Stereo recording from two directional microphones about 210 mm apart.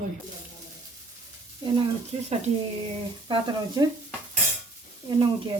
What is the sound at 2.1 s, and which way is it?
Speech, 30° right (ahead or behind).